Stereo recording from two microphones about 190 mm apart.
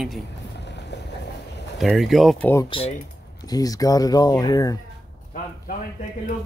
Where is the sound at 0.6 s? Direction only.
65° left (ahead or behind).